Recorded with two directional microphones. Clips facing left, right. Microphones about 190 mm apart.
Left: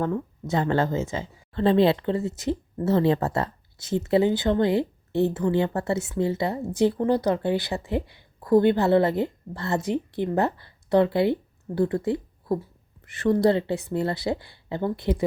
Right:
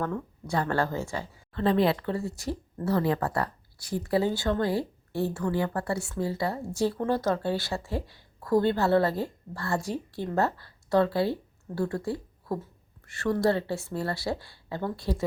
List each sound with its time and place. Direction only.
0.0 s speech: 20° left (ahead or behind)